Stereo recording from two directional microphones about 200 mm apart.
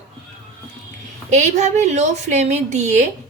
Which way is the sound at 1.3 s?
35° right (ahead or behind).